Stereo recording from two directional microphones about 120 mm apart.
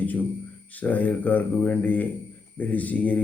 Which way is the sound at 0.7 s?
15° left (ahead or behind).